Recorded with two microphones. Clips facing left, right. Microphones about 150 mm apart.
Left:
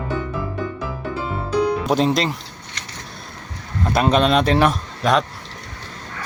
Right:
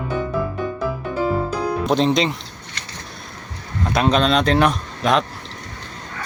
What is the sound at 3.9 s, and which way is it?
Speech, 5° left (ahead or behind).